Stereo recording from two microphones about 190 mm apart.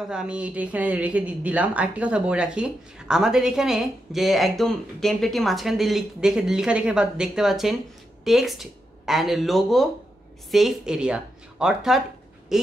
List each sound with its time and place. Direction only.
0.1 s speech: 5° right (ahead or behind)